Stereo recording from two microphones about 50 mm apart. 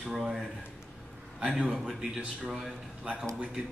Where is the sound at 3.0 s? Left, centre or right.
Centre.